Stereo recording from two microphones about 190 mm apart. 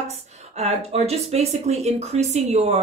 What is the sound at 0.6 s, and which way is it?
Speech, 35° right (ahead or behind).